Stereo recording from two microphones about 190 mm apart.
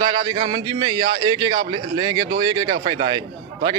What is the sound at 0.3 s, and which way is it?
A man's voice, 25° right (ahead or behind).